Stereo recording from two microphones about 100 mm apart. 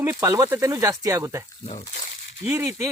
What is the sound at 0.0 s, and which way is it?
A man's voice, 25° right (ahead or behind).